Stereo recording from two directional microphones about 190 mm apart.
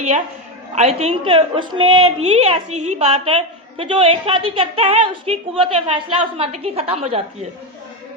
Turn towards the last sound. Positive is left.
turn(degrees=-35)  # may be behind; listen again after turning